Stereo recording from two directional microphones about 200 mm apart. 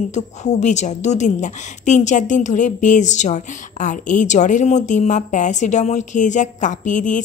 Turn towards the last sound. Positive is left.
turn(degrees=40)  # may be behind; listen again after turning